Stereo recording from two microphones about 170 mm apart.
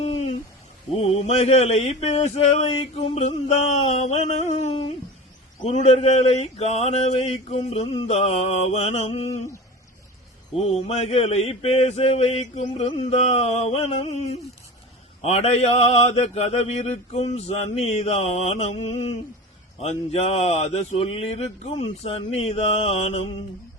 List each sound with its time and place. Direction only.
0.0 s a sound: 40° left (ahead or behind)
0.9 s mantra: 35° left (ahead or behind)
10.5 s mantra: 35° left (ahead or behind)